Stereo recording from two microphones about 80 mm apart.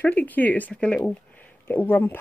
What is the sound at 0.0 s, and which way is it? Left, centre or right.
Speech, centre.